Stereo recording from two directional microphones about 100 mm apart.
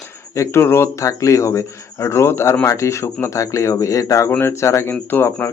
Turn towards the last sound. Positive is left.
turn(degrees=20)  # may be behind; listen again after turning